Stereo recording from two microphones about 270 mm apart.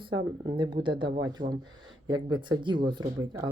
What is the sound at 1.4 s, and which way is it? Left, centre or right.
Speech, right.